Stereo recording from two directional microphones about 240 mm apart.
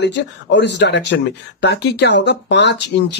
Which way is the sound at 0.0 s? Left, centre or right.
Left.